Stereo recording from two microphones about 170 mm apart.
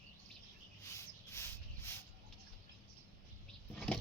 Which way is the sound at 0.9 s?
15° left (ahead or behind).